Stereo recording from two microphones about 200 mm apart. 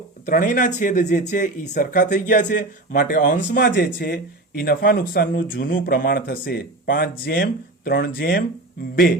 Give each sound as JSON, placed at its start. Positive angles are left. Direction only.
{"t": 0.3, "sound": "speech", "side_deg": 40}